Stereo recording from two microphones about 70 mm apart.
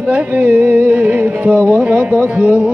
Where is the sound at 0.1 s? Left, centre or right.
Right.